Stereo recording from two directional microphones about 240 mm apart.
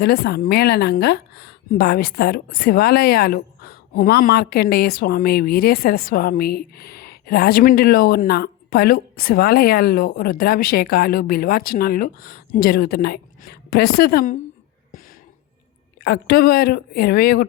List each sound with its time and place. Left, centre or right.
0.0 s a woman's voice: left
16.0 s a woman's voice: left